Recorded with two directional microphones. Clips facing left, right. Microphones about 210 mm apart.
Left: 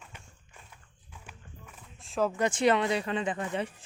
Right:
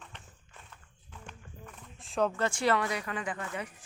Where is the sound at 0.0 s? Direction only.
10° left (ahead or behind).